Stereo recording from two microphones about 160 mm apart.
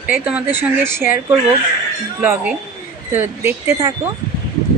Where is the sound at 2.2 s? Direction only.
15° right (ahead or behind).